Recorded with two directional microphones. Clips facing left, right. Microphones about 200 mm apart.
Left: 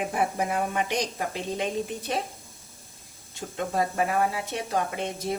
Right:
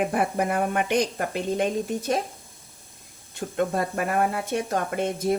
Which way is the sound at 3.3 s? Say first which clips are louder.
Right 5 dB; 55° right (ahead or behind).